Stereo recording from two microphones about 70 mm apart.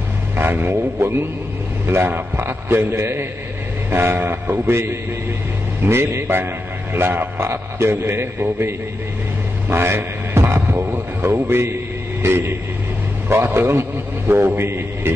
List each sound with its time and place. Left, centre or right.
0.4 s a man's voice: right